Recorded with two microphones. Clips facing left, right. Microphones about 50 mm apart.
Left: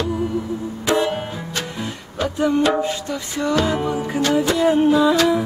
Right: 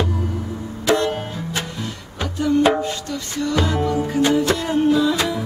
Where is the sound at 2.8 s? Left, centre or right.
Centre.